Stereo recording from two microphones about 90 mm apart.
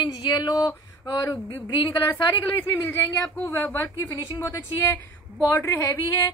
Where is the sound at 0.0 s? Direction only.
55° left (ahead or behind).